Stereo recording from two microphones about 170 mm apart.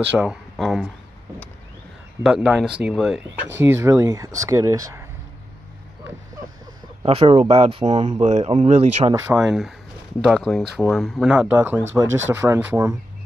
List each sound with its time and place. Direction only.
0.1 s speech: centre (ahead or behind)
0.6 s a sound: centre (ahead or behind)
2.2 s speech: 5° right (ahead or behind)
3.6 s speech: 15° right (ahead or behind)
7.0 s speech: 30° right (ahead or behind)
9.1 s speech: 20° right (ahead or behind)
9.4 s speech: centre (ahead or behind)